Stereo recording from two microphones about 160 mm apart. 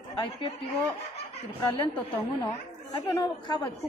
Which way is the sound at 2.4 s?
25° left (ahead or behind).